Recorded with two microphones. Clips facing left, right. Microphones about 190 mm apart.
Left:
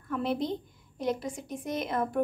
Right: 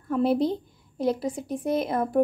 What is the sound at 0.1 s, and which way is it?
A woman's voice, 35° right (ahead or behind).